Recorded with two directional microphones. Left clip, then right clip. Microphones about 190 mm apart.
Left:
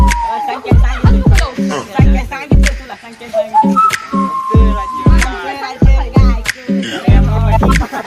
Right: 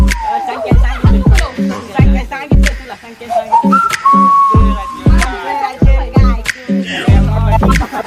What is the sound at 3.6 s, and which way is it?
Whistling, centre (ahead or behind).